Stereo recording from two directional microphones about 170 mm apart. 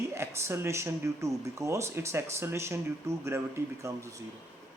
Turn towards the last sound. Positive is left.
turn(degrees=-15)  # may be behind; listen again after turning